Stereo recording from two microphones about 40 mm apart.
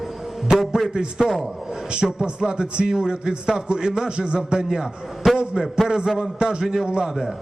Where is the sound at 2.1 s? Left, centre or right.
Right.